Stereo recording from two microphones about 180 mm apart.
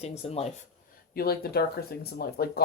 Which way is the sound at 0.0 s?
35° left (ahead or behind).